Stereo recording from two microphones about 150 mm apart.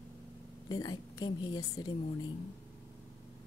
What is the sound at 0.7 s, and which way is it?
Speech, 25° left (ahead or behind).